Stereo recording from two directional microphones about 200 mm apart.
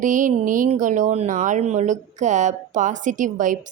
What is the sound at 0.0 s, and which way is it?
Speech, 40° right (ahead or behind).